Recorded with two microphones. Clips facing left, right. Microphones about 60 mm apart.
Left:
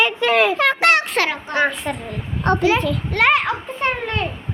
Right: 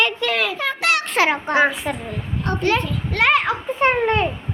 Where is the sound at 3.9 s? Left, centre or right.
Right.